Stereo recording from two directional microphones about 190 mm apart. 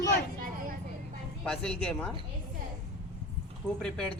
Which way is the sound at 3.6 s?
5° left (ahead or behind).